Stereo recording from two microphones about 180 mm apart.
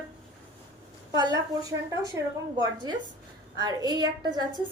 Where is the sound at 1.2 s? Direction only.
20° right (ahead or behind).